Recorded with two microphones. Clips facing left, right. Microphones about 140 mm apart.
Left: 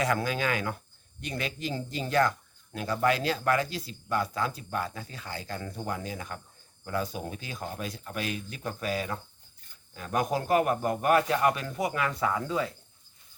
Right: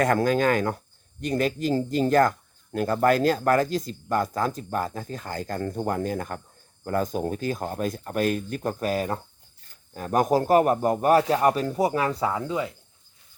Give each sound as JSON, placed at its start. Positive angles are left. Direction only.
{"t": 0.0, "sound": "a man's voice", "side_deg": -45}